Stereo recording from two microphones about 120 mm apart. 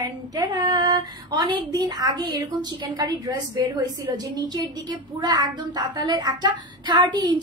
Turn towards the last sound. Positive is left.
turn(degrees=-35)  # may be behind; listen again after turning